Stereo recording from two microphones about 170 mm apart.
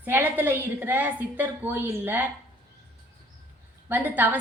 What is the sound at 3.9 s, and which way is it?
Speech, 10° right (ahead or behind).